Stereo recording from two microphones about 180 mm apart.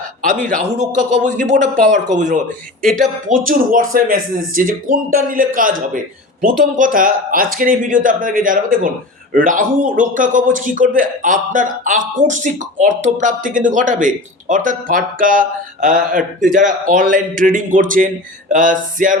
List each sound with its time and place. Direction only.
0.5 s a man's voice: 45° right (ahead or behind)